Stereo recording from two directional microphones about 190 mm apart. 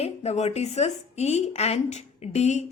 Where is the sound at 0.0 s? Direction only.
35° left (ahead or behind).